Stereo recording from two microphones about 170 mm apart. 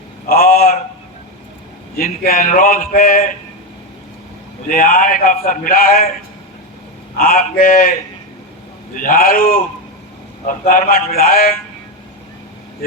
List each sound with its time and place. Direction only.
0.3 s a sound: 60° left (ahead or behind)
2.0 s speech: 60° left (ahead or behind)
4.7 s speech: 55° left (ahead or behind)
7.2 s speech: 60° left (ahead or behind)
9.0 s speech: 55° left (ahead or behind)